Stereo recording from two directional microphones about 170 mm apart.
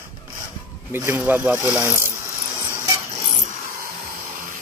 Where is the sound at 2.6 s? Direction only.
15° right (ahead or behind).